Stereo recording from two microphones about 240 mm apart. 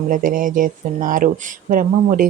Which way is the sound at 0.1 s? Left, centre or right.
Right.